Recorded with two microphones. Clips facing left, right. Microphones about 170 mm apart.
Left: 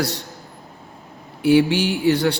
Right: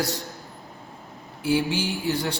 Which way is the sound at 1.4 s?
70° left (ahead or behind).